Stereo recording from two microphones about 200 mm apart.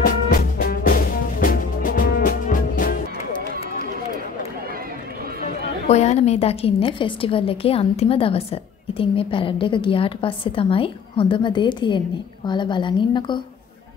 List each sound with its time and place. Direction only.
0.0 s music: 45° left (ahead or behind)
5.9 s a woman's voice: 35° left (ahead or behind)